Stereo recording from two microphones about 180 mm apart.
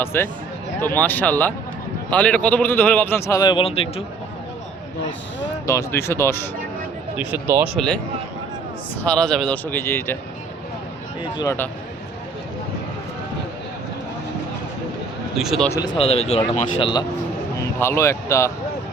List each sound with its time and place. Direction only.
0.0 s a man's voice: 10° left (ahead or behind); by 4.0 s 35° left (ahead or behind)
5.6 s a man's voice: 15° left (ahead or behind)
7.2 s speech: 10° right (ahead or behind)
9.0 s a man's voice: 5° left (ahead or behind)
11.3 s a man's voice: 15° left (ahead or behind)
15.4 s speech: centre (ahead or behind)
15.7 s speech: 25° left (ahead or behind)
16.6 s speech: 25° left (ahead or behind)